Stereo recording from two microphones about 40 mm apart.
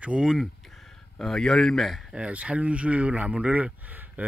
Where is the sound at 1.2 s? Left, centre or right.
Centre.